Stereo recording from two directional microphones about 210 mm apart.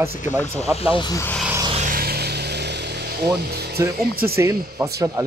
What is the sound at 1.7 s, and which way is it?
Vehicle, 40° right (ahead or behind).